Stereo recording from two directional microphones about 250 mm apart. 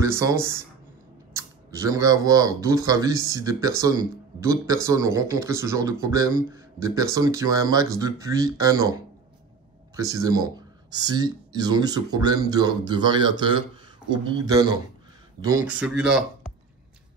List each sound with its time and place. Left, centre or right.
0.0 s speech: centre
9.9 s speech: centre